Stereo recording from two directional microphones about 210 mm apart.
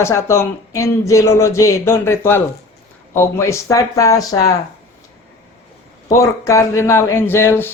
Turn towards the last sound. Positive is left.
turn(degrees=10)  # may be behind; listen again after turning